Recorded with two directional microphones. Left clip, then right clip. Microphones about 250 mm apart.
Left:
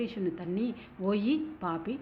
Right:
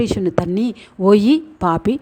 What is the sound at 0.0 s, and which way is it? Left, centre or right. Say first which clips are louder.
A woman's voice: right 16 dB; right.